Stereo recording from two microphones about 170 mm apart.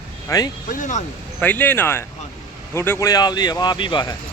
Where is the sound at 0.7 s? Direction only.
45° left (ahead or behind).